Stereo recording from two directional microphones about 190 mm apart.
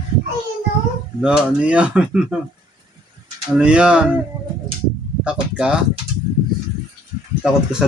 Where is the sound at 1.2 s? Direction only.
5° right (ahead or behind).